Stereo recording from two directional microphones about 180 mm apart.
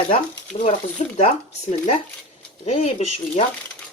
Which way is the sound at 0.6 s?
35° left (ahead or behind).